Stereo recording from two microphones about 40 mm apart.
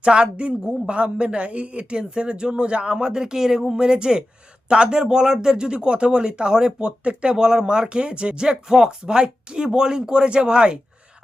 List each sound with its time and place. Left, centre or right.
0.0 s speech: right
6.7 s speech: right